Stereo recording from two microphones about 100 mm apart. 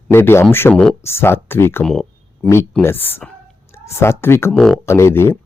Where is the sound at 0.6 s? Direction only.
15° left (ahead or behind).